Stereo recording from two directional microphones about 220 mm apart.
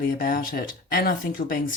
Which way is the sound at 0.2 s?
40° left (ahead or behind).